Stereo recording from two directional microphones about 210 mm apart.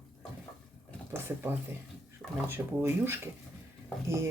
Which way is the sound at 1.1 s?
10° right (ahead or behind).